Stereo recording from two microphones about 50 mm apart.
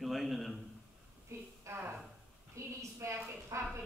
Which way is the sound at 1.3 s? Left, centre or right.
Right.